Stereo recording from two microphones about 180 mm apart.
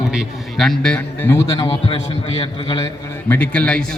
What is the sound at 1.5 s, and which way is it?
A man's voice, 25° left (ahead or behind).